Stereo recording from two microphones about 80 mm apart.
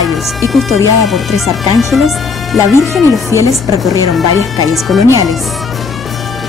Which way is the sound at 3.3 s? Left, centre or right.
Left.